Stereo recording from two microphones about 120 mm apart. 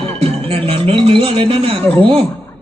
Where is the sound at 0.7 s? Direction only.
50° right (ahead or behind).